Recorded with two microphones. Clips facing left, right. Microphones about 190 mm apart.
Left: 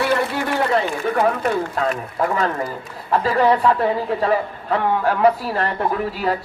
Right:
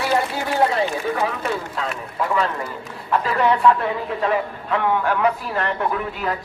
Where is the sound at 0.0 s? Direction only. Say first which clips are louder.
Left 2 dB; 60° left (ahead or behind).